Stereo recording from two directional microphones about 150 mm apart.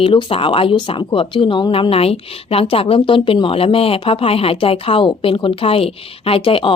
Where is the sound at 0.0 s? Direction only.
35° left (ahead or behind).